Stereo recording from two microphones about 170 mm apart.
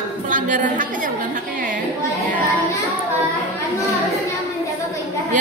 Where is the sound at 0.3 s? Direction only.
50° right (ahead or behind).